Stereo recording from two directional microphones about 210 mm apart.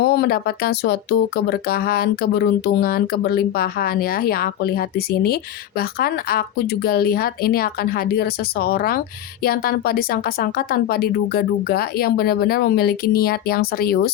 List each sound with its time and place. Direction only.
0.0 s speech: 50° left (ahead or behind)